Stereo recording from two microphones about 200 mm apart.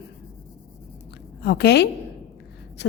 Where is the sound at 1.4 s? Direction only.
55° left (ahead or behind).